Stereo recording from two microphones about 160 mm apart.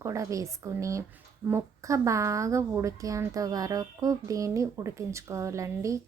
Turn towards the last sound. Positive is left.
turn(degrees=-20)  # may be behind; listen again after turning